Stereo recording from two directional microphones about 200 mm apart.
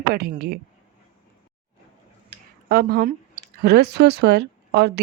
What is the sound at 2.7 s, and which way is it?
Speech, 50° right (ahead or behind).